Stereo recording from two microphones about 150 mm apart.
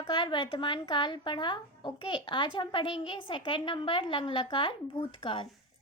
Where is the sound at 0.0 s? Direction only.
30° left (ahead or behind).